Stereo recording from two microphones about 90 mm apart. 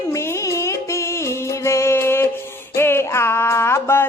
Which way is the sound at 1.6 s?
30° left (ahead or behind).